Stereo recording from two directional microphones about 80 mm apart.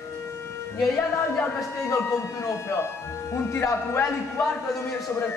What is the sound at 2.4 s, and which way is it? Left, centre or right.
Speech, left.